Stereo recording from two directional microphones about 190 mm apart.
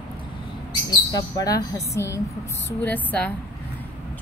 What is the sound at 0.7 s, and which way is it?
A woman's voice, 20° left (ahead or behind).